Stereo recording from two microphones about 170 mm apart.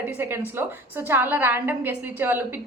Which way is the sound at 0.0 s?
15° right (ahead or behind).